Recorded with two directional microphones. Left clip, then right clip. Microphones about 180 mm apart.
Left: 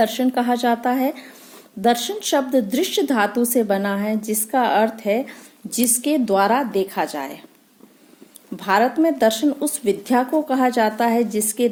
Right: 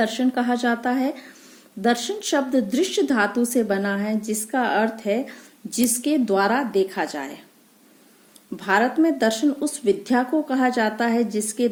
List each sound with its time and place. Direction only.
0.0 s a woman's voice: 30° left (ahead or behind)
8.5 s a woman's voice: 30° left (ahead or behind)